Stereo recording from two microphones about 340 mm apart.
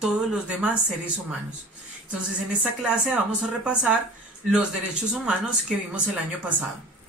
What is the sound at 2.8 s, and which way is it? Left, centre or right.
Speech, centre.